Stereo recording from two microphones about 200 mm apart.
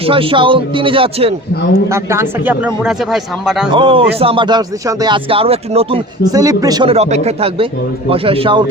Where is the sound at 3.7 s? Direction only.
25° right (ahead or behind).